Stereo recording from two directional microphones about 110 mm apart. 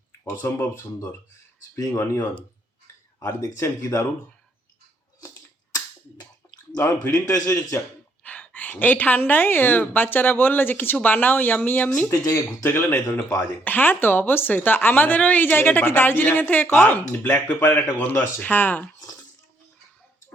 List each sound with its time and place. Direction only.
0.3 s speech: 20° left (ahead or behind)
1.7 s speech: 25° left (ahead or behind)
6.7 s speech: 20° left (ahead or behind)
7.3 s speech: 30° left (ahead or behind)
8.2 s a woman's voice: 15° left (ahead or behind)
12.0 s speech: 30° left (ahead or behind)
12.6 s a woman's voice: 20° left (ahead or behind)